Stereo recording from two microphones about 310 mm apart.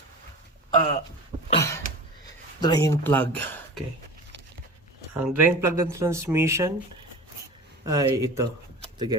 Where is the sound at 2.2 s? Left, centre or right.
Centre.